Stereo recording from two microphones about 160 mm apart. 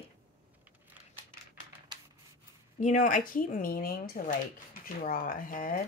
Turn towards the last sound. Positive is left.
turn(degrees=60)  # may be behind; listen again after turning